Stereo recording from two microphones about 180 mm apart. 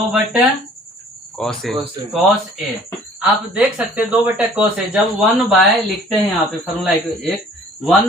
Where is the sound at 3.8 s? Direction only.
10° right (ahead or behind).